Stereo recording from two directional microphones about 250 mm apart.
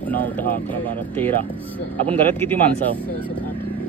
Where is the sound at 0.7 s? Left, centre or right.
Centre.